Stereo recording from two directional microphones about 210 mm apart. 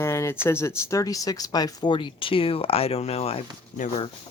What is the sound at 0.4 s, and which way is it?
Speech, 10° left (ahead or behind).